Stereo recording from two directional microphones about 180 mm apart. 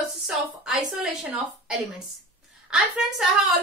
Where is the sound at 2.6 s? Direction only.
5° right (ahead or behind).